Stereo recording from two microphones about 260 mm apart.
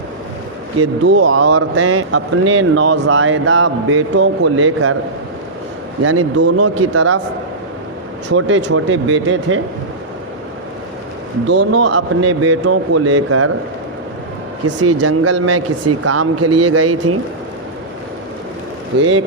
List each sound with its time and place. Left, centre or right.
0.8 s a man's voice: right
6.0 s speech: right
8.3 s a man's voice: right
11.4 s speech: right
14.8 s speech: right
18.9 s a man's voice: right